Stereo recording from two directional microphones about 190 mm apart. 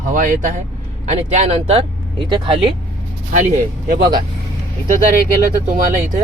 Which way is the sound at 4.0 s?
20° right (ahead or behind).